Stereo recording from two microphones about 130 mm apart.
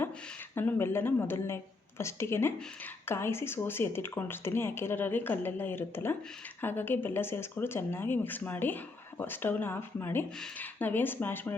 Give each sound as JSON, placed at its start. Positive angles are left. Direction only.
{"t": 0.5, "sound": "a woman's voice", "side_deg": 20}